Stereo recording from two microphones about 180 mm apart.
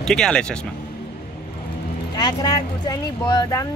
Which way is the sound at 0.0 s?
5° left (ahead or behind).